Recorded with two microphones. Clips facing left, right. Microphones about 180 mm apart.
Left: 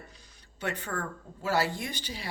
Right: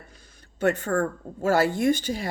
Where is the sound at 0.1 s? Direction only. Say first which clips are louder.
Right 3 dB; 50° right (ahead or behind).